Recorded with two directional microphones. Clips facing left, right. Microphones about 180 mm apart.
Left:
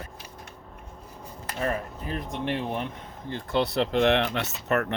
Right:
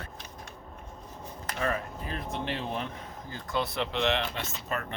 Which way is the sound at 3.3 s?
30° left (ahead or behind).